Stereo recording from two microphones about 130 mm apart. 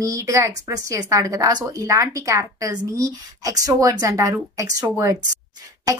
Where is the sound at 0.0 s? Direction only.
25° right (ahead or behind).